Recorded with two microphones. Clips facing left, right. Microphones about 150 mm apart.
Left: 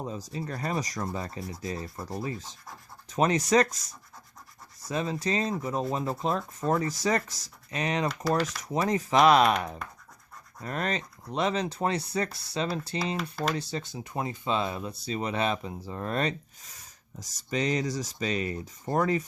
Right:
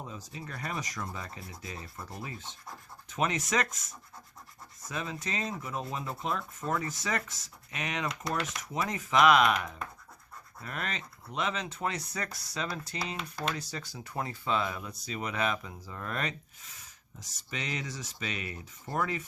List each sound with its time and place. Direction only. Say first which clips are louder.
0.0 s speech: left 8 dB; 35° left (ahead or behind)